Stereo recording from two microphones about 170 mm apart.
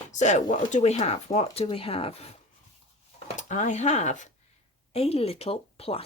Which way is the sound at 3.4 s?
45° left (ahead or behind).